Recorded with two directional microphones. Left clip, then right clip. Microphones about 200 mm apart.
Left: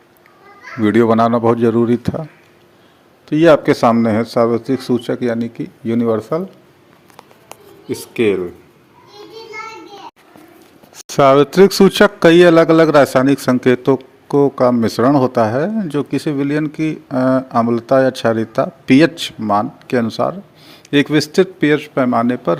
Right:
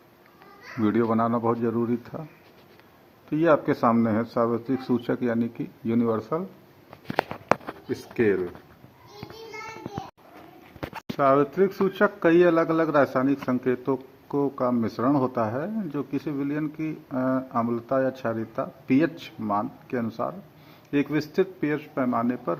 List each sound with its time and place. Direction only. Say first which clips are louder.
0.8 s speech: left 11 dB; 30° left (ahead or behind)
3.2 s speech: left 11 dB; 35° left (ahead or behind)
7.9 s speech: left 8 dB; 40° left (ahead or behind)
11.2 s speech: left 11 dB; 70° left (ahead or behind)
11.5 s a man's voice: left 14 dB; 55° left (ahead or behind)